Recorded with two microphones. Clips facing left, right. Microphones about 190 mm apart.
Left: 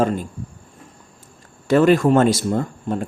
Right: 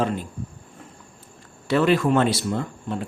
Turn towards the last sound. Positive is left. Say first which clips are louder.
# left 5 dB
turn(degrees=45)  # may be behind; listen again after turning